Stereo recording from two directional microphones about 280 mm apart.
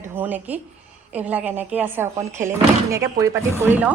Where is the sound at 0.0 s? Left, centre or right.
Centre.